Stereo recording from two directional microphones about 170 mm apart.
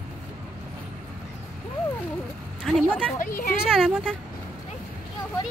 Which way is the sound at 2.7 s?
Centre (ahead or behind).